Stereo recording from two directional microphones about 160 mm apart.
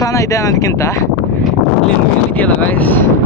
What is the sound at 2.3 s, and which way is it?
Speech, 10° left (ahead or behind).